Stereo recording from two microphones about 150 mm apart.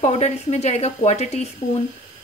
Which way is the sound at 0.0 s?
45° left (ahead or behind).